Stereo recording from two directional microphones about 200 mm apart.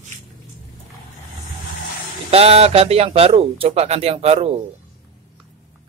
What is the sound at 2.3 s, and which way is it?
Speech, 30° right (ahead or behind).